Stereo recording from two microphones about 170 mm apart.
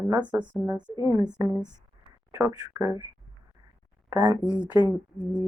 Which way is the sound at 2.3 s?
20° right (ahead or behind).